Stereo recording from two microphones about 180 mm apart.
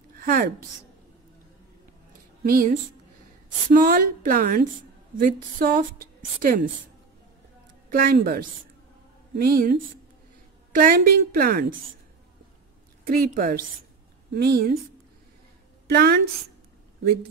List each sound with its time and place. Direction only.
0.1 s speech: 50° right (ahead or behind)
2.4 s a woman's voice: 55° right (ahead or behind)
3.7 s a woman's voice: 50° right (ahead or behind)
7.9 s a woman's voice: 50° right (ahead or behind)
13.0 s a woman's voice: 55° right (ahead or behind)
15.9 s a woman's voice: 65° right (ahead or behind)